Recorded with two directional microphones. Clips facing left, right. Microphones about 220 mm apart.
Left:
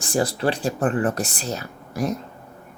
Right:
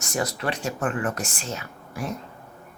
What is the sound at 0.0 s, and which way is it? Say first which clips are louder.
Speech: left 6 dB; 30° left (ahead or behind).